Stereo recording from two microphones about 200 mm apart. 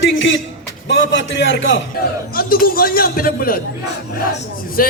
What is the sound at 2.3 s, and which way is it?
A man's voice, 45° left (ahead or behind).